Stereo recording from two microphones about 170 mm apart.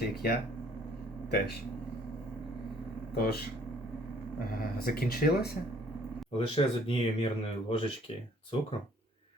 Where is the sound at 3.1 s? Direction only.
65° left (ahead or behind).